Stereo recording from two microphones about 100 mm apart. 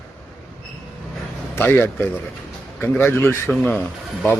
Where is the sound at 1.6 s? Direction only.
20° left (ahead or behind).